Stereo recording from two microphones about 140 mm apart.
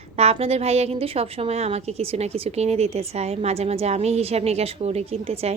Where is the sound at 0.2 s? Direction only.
45° right (ahead or behind).